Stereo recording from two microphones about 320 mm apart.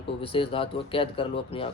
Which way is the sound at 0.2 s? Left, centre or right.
Centre.